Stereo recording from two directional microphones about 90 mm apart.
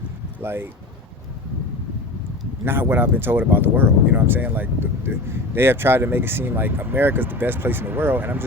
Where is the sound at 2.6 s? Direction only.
25° right (ahead or behind).